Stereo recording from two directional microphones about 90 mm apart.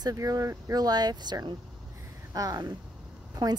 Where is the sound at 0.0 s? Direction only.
40° right (ahead or behind).